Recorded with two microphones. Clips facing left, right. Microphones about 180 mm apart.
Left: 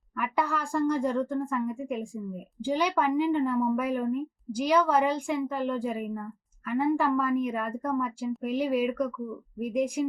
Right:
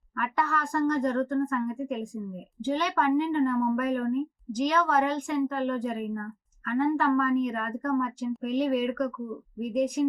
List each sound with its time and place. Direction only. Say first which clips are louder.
0.2 s a woman's voice: even; 10° left (ahead or behind)